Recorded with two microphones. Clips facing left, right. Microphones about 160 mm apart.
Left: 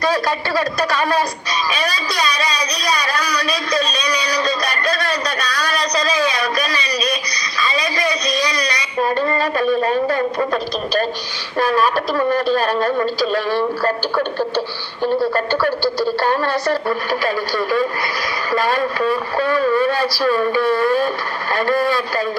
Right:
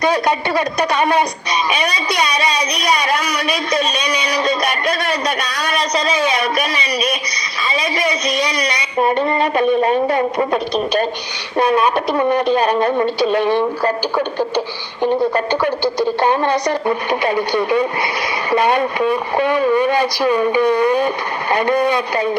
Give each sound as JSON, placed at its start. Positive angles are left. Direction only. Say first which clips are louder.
{"t": 0.0, "sound": "speech", "louder": "right 3 dB", "side_deg": -20}